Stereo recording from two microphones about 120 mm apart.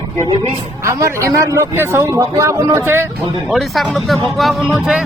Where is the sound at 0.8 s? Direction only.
25° right (ahead or behind).